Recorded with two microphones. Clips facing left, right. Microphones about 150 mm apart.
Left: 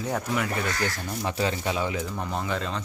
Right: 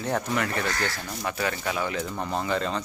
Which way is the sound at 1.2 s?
25° left (ahead or behind).